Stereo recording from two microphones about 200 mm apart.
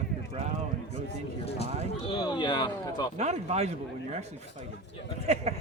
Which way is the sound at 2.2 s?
25° left (ahead or behind).